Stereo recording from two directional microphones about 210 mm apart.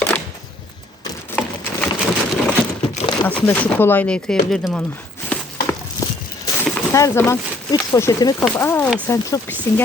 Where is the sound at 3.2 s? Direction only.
10° left (ahead or behind).